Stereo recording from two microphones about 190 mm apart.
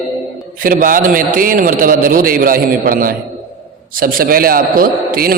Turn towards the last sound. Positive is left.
turn(degrees=-50)  # may be behind; listen again after turning